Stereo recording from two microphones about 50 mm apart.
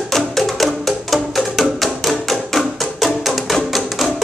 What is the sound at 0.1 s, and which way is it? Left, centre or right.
Music, centre.